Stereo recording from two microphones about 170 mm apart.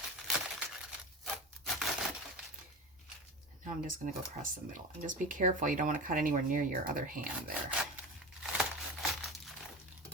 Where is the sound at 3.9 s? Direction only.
55° right (ahead or behind).